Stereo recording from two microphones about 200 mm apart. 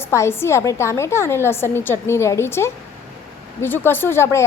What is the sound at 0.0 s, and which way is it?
Speech, 15° left (ahead or behind).